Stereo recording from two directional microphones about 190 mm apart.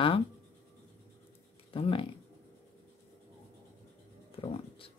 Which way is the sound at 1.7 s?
30° left (ahead or behind).